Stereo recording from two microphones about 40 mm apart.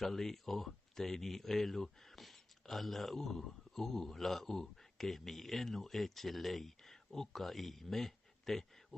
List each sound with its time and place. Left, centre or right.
0.0 s speech: centre